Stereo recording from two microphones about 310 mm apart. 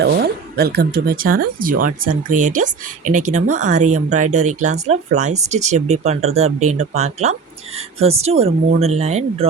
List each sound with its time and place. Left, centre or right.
0.0 s speech: right